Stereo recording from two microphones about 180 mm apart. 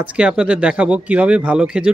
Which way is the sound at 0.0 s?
5° right (ahead or behind).